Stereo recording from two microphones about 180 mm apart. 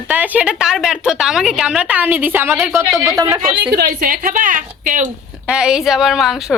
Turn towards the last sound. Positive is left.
turn(degrees=0)  # may be behind; listen again after turning